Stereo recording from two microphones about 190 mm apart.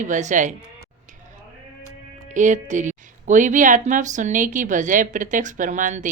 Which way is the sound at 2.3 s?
40° right (ahead or behind).